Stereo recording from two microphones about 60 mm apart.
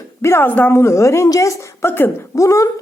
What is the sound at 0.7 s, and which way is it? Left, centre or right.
Speech, left.